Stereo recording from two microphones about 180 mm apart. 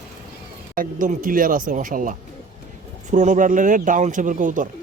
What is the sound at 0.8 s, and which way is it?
Speech, 50° right (ahead or behind).